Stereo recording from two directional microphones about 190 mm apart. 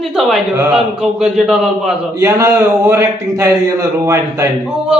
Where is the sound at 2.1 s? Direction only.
15° right (ahead or behind).